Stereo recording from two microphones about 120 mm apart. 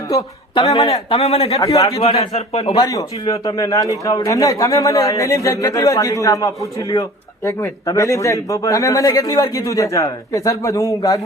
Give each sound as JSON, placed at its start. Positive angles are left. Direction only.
{"t": 0.1, "sound": "a woman's voice", "side_deg": 30}
{"t": 0.9, "sound": "a man's voice", "side_deg": 55}
{"t": 1.5, "sound": "speech", "side_deg": 25}
{"t": 2.0, "sound": "a man's voice", "side_deg": 60}
{"t": 2.7, "sound": "speech", "side_deg": 30}